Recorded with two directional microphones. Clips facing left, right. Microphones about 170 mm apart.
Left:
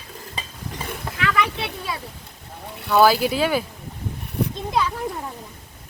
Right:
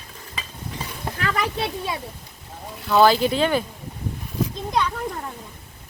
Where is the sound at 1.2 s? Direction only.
35° right (ahead or behind).